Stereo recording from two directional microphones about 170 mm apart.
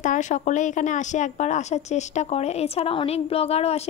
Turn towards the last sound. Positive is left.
turn(degrees=35)  # may be behind; listen again after turning